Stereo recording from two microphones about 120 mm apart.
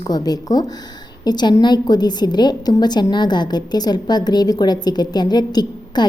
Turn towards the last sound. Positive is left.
turn(degrees=35)  # may be behind; listen again after turning